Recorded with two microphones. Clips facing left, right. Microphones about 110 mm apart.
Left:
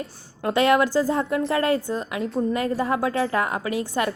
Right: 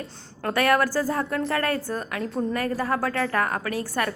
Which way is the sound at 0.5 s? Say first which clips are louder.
Left 3 dB; 20° left (ahead or behind).